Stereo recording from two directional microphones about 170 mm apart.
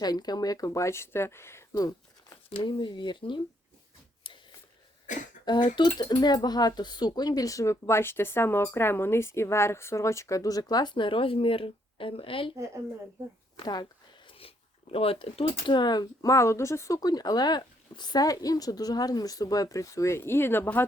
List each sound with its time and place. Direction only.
0.0 s speech: 25° left (ahead or behind)
2.5 s speech: 30° left (ahead or behind)
5.5 s speech: 25° left (ahead or behind)
12.5 s a woman's voice: 15° right (ahead or behind)
13.6 s speech: 25° left (ahead or behind)